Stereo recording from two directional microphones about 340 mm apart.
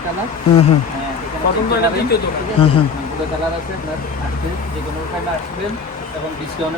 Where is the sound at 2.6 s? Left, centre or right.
Centre.